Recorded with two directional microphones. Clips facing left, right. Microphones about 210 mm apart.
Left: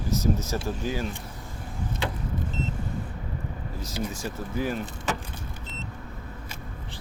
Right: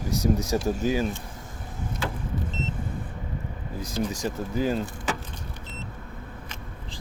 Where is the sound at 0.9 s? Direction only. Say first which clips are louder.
Right 5 dB; 15° right (ahead or behind).